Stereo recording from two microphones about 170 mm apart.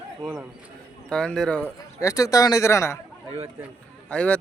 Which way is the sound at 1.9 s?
20° left (ahead or behind).